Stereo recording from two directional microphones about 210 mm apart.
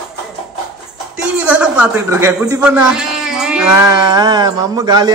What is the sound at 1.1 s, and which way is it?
A man's voice, 5° right (ahead or behind).